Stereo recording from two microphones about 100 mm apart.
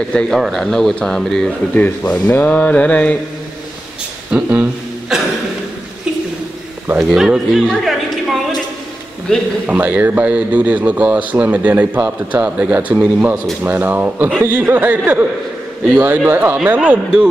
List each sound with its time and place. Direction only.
0.1 s speech: 5° left (ahead or behind)
1.8 s speech: 15° left (ahead or behind)
4.3 s speech: 15° right (ahead or behind)
7.0 s speech: 5° right (ahead or behind)
9.7 s speech: 15° right (ahead or behind)